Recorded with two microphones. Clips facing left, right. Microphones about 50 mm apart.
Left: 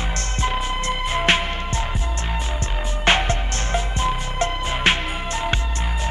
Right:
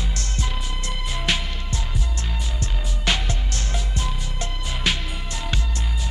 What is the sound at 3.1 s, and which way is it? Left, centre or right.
Music, left.